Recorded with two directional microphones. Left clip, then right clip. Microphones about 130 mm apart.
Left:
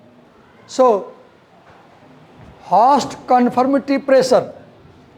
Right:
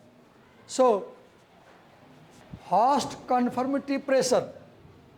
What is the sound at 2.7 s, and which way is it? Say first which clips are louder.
Speech: left 10 dB; 10° left (ahead or behind).